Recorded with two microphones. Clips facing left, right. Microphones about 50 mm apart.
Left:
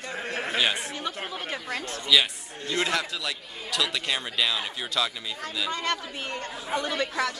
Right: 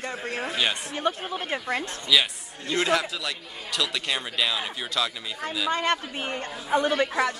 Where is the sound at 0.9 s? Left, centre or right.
Right.